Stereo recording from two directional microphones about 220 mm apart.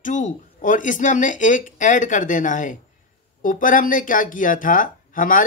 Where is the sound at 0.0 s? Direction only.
35° left (ahead or behind).